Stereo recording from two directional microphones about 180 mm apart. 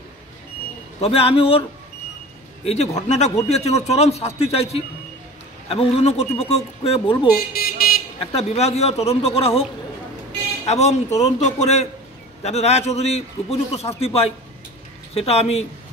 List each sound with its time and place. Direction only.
1.0 s speech: 30° left (ahead or behind)
2.6 s speech: 35° left (ahead or behind)
7.5 s car alarm: 55° left (ahead or behind)
8.4 s speech: 35° left (ahead or behind)